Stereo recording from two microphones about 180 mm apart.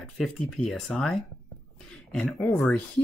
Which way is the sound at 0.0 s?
Centre (ahead or behind).